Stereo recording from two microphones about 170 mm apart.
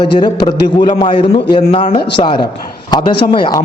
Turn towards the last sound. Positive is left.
turn(degrees=25)  # may be behind; listen again after turning